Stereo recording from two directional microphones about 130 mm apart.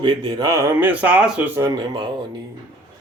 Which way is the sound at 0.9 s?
10° right (ahead or behind).